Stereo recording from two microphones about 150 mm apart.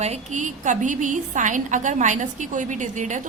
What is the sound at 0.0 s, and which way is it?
A woman's voice, 50° right (ahead or behind).